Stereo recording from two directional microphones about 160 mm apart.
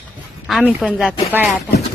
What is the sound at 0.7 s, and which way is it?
Speech, 5° right (ahead or behind).